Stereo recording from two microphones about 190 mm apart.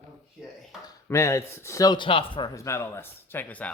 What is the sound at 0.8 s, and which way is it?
Speech, 15° left (ahead or behind).